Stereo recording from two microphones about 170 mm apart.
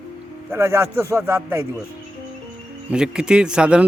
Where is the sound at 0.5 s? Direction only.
15° right (ahead or behind).